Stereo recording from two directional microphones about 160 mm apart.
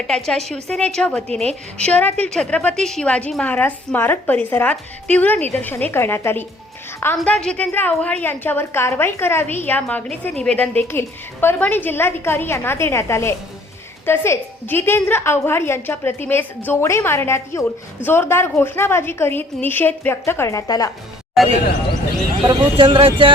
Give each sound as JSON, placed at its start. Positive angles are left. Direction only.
{"t": 0.1, "sound": "a woman's voice", "side_deg": 0}
{"t": 21.4, "sound": "a woman's voice", "side_deg": 0}
{"t": 22.4, "sound": "speech", "side_deg": -30}